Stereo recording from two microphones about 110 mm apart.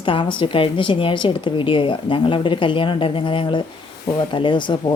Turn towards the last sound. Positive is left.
turn(degrees=45)  # may be behind; listen again after turning